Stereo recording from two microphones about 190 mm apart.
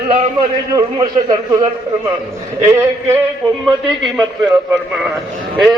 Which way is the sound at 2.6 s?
15° right (ahead or behind).